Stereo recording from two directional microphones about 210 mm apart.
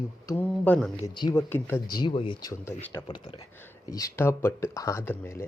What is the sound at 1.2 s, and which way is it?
Speech, 15° left (ahead or behind).